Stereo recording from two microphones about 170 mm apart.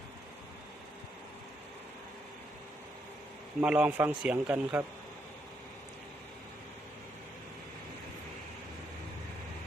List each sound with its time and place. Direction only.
3.6 s speech: 5° right (ahead or behind)